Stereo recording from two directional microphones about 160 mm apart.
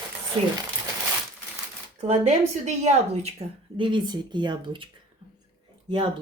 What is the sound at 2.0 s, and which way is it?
A woman's voice, 45° right (ahead or behind).